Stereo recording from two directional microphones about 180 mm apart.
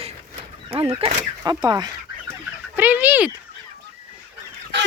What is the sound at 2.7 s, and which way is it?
Speech, 10° right (ahead or behind).